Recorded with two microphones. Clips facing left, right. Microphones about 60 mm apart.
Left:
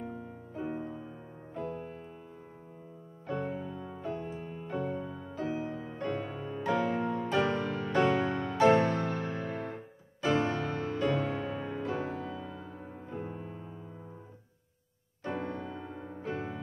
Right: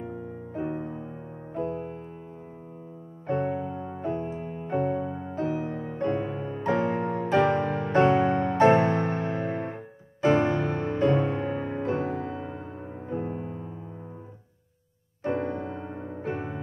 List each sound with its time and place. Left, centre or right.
0.6 s music: right
3.3 s music: right
15.3 s music: right